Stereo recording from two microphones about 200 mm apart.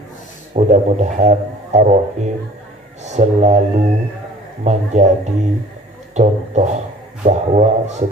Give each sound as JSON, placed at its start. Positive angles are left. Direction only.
{"t": 0.6, "sound": "speech", "side_deg": -35}
{"t": 3.0, "sound": "speech", "side_deg": -35}